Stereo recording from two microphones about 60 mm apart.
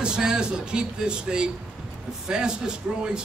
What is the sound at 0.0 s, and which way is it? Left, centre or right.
Speech, centre.